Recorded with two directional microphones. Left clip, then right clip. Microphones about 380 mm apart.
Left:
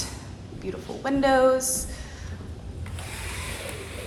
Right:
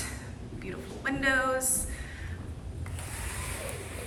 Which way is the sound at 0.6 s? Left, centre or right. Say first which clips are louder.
Left 4 dB; centre.